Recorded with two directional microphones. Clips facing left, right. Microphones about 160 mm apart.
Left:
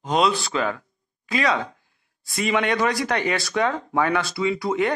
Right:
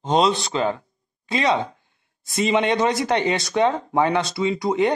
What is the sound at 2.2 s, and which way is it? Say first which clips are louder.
Speech: right 3 dB; 25° right (ahead or behind).